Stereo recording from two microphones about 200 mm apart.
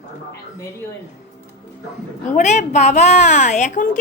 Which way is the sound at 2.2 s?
35° left (ahead or behind).